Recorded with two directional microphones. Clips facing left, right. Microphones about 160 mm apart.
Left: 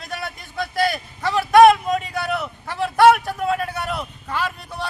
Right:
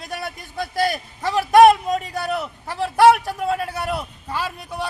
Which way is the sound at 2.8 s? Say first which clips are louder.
Even; 10° right (ahead or behind).